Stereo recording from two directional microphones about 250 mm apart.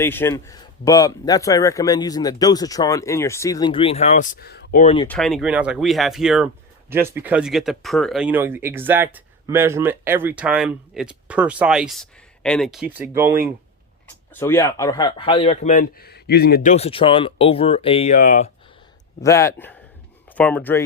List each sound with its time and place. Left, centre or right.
0.0 s a man's voice: centre; by 4.9 s left
5.0 s speech: centre
14.3 s speech: centre; by 16.7 s left
16.7 s speech: left
19.2 s a man's voice: centre